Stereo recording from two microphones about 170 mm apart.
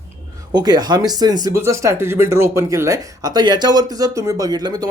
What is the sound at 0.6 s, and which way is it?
Speech, 25° right (ahead or behind).